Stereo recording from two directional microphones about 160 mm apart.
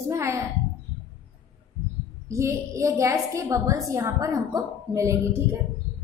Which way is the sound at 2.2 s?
20° right (ahead or behind).